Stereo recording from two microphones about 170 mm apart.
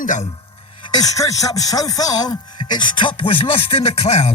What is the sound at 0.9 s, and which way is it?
Speech, 20° left (ahead or behind).